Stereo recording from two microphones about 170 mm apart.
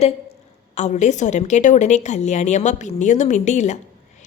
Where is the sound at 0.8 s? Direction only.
45° left (ahead or behind).